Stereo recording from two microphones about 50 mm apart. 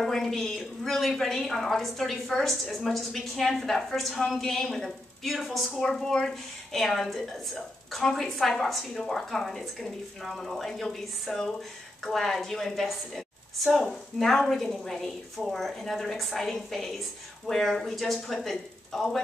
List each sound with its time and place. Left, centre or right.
0.0 s a woman's voice: centre